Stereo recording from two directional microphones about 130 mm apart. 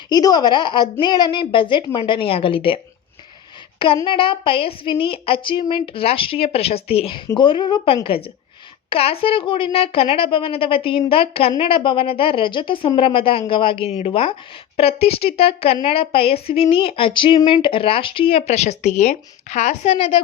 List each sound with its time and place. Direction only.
0.1 s a woman's voice: 30° left (ahead or behind)
4.0 s a woman's voice: 40° left (ahead or behind)
7.3 s a woman's voice: 40° left (ahead or behind)